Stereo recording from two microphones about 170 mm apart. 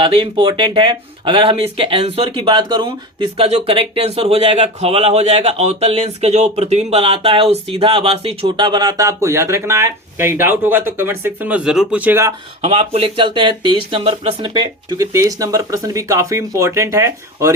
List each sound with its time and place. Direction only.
0.0 s speech: 30° right (ahead or behind); by 12.3 s 10° right (ahead or behind)
12.6 s speech: 35° right (ahead or behind); by 17.5 s 15° right (ahead or behind)